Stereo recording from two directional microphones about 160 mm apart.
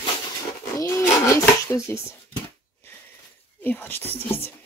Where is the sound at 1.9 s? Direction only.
10° left (ahead or behind).